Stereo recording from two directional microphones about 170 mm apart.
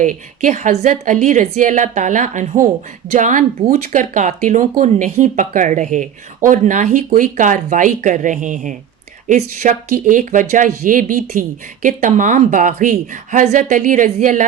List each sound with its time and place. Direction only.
0.0 s speech: 50° right (ahead or behind)